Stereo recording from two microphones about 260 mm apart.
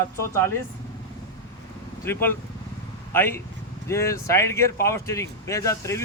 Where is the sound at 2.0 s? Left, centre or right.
Centre.